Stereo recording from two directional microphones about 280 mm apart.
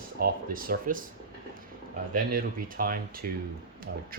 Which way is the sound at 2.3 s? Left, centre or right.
Right.